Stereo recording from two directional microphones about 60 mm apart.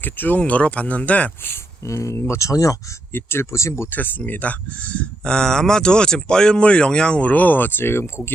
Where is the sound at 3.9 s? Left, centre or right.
Left.